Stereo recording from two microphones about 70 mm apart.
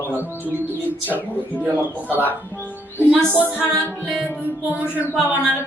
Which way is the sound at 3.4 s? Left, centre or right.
Right.